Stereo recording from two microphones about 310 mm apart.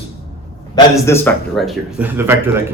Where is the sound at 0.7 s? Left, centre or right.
Centre.